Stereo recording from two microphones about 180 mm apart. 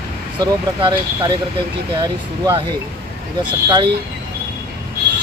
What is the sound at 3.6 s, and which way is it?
Speech, 20° right (ahead or behind).